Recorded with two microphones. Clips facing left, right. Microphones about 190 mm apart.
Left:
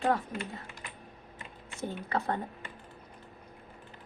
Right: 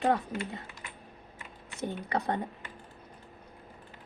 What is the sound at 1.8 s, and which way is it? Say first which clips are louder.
Speech: right 1 dB; 20° right (ahead or behind).